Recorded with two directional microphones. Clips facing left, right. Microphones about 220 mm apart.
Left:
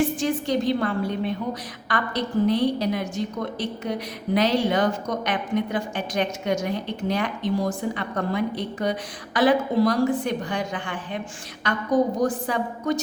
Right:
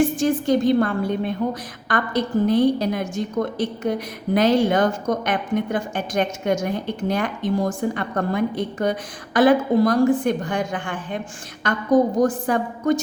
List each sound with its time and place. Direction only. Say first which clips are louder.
0.2 s a woman's voice: right 5 dB; 50° right (ahead or behind)